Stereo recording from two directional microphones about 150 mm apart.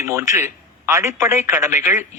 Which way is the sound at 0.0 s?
20° right (ahead or behind).